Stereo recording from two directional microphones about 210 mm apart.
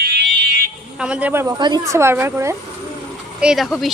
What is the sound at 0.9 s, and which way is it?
A woman's voice, 5° right (ahead or behind).